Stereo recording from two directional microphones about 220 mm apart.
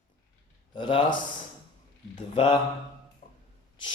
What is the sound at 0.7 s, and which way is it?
Speech, 20° left (ahead or behind).